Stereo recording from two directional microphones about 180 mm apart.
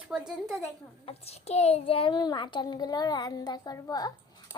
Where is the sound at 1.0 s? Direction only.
35° left (ahead or behind).